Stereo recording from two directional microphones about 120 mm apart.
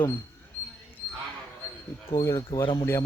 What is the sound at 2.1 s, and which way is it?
Speech, 30° left (ahead or behind).